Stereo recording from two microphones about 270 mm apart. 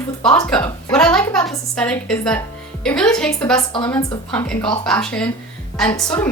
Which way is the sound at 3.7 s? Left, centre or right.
Centre.